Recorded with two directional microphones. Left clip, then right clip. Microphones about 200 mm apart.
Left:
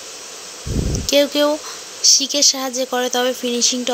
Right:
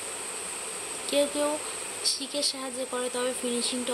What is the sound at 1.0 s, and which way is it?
Speech, 35° left (ahead or behind).